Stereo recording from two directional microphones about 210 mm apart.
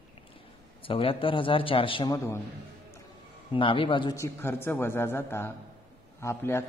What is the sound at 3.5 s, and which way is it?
A man's voice, 25° left (ahead or behind).